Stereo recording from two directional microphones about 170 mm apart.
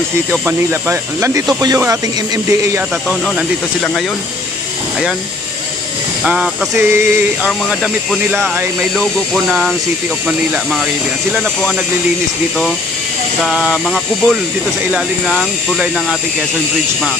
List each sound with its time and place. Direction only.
0.3 s speech: 10° right (ahead or behind)
3.1 s speech: 5° left (ahead or behind)
6.2 s speech: centre (ahead or behind)
6.8 s speech: 15° right (ahead or behind)
7.4 s speech: centre (ahead or behind)
13.4 s speech: centre (ahead or behind)